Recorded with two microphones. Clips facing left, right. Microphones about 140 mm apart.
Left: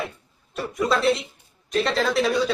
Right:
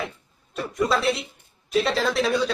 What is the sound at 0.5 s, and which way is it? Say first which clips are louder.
A man's voice: even; centre (ahead or behind).